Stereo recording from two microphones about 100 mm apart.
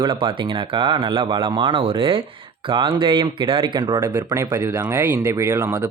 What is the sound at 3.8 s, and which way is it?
Speech, 45° right (ahead or behind).